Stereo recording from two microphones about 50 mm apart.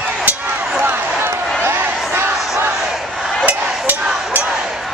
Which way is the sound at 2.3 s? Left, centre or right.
Centre.